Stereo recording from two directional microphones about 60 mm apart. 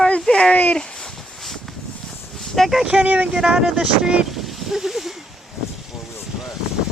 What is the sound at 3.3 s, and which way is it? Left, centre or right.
Speech, centre.